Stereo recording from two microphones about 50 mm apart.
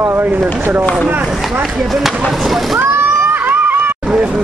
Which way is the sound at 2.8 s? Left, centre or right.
Right.